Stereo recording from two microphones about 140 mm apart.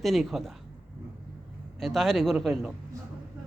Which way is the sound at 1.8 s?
Centre (ahead or behind).